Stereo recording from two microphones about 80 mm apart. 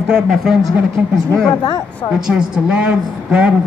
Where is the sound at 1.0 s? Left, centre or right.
Centre.